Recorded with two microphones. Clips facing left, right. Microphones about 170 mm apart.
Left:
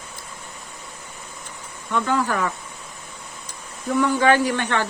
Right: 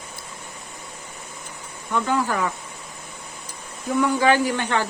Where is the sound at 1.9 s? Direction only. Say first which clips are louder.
Left 1 dB; 15° right (ahead or behind).